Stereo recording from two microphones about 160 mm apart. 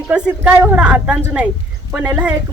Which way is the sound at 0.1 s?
10° right (ahead or behind).